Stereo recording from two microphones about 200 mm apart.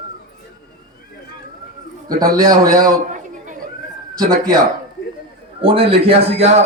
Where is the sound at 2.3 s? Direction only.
20° right (ahead or behind).